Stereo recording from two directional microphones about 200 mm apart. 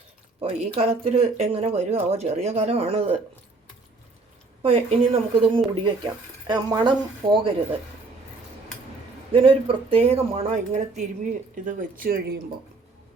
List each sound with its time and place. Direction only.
0.4 s speech: 30° right (ahead or behind)
4.6 s speech: 30° right (ahead or behind)
9.3 s speech: 25° right (ahead or behind); by 12.4 s 50° right (ahead or behind)